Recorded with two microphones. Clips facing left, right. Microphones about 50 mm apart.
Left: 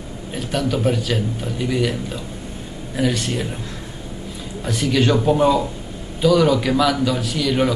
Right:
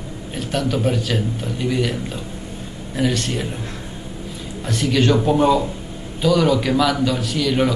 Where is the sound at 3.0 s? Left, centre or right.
Centre.